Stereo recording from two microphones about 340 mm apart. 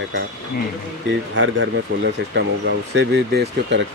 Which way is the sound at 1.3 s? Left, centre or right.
Right.